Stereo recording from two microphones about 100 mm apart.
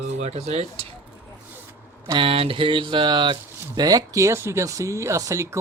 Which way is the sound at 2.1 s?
70° right (ahead or behind).